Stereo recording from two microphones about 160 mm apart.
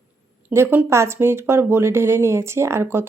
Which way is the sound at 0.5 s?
15° right (ahead or behind).